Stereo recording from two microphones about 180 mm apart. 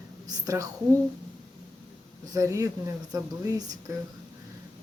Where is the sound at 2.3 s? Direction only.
15° right (ahead or behind).